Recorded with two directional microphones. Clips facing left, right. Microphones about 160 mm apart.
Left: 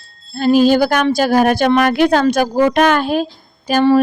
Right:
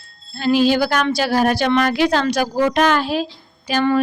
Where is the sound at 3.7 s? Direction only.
40° left (ahead or behind).